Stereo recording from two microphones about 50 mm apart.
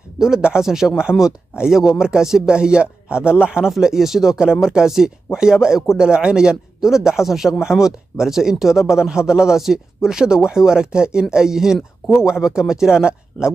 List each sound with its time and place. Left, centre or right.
0.2 s a man's voice: centre